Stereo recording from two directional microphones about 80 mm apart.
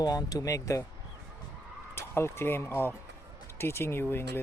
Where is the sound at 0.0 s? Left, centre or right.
Left.